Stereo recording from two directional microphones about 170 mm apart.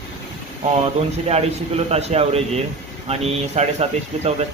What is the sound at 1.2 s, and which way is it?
A man's voice, 35° right (ahead or behind).